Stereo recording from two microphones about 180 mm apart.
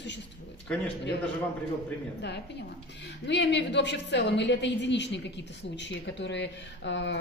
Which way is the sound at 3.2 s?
75° left (ahead or behind).